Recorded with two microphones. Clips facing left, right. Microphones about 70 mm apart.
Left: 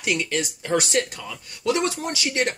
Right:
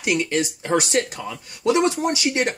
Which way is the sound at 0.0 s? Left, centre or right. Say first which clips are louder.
Right 3 dB; right.